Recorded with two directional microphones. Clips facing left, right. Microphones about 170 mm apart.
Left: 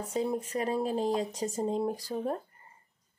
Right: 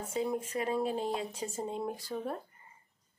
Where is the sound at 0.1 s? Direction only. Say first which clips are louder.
Left 2 dB; 35° left (ahead or behind).